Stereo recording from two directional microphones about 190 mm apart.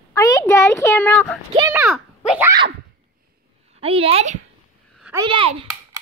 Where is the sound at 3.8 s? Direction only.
30° right (ahead or behind).